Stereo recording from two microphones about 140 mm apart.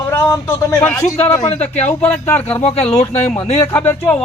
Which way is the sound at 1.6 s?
55° left (ahead or behind).